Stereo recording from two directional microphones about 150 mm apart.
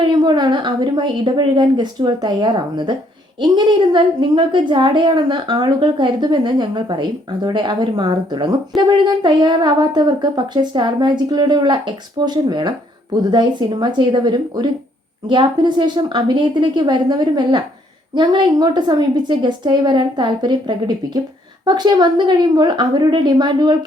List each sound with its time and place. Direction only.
0.1 s a woman's voice: 30° right (ahead or behind)